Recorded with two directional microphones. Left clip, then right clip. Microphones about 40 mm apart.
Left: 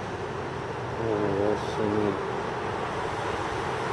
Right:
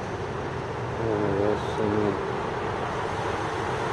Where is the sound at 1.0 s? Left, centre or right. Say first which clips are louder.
Right 1 dB; centre.